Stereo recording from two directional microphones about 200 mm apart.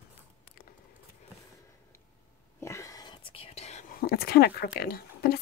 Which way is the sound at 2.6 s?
15° left (ahead or behind).